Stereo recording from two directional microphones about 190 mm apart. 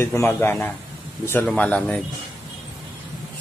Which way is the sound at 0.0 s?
10° left (ahead or behind).